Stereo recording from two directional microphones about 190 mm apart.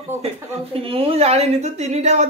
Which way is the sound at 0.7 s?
30° right (ahead or behind).